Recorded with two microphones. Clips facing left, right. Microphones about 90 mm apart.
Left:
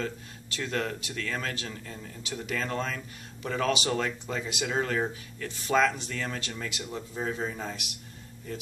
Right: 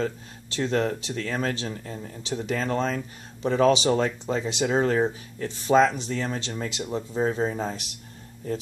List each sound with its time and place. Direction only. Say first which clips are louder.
0.0 s speech: right 6 dB; 30° right (ahead or behind)